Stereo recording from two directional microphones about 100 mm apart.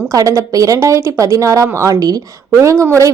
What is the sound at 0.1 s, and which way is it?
A woman's voice, 35° right (ahead or behind).